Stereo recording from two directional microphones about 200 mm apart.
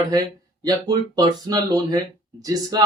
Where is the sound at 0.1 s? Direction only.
20° right (ahead or behind).